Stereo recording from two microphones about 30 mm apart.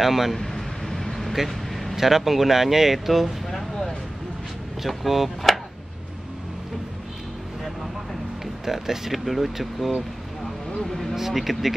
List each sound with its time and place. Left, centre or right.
0.0 s speech: centre
0.4 s a sound: centre
1.3 s vehicle: centre
2.0 s speech: centre
4.8 s speech: centre
8.6 s speech: centre
9.1 s speech: centre
10.8 s speech: centre
11.1 s speech: centre